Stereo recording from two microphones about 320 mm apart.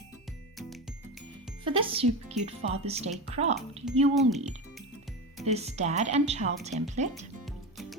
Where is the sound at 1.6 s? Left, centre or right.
Centre.